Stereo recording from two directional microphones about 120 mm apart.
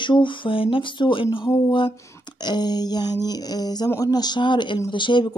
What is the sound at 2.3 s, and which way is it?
Speech, 35° left (ahead or behind).